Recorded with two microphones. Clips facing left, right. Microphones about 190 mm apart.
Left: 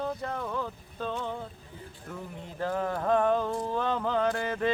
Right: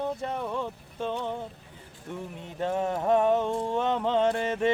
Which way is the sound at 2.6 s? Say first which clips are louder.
Right 2 dB; 25° right (ahead or behind).